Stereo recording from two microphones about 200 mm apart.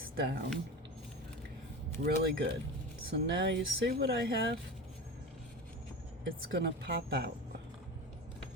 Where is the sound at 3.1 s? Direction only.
60° right (ahead or behind).